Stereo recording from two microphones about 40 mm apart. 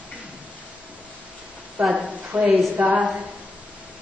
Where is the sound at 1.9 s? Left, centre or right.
Right.